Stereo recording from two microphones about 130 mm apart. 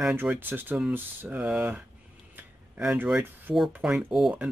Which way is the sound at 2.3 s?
10° right (ahead or behind).